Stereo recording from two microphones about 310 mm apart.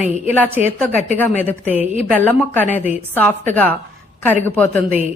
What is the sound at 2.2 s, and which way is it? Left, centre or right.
Speech, centre.